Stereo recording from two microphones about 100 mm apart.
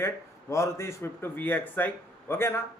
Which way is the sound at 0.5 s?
30° left (ahead or behind).